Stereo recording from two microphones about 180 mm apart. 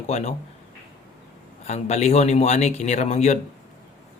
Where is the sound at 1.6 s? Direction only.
40° left (ahead or behind).